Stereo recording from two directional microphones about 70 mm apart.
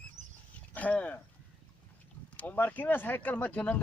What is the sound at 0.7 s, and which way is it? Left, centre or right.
Speech, left.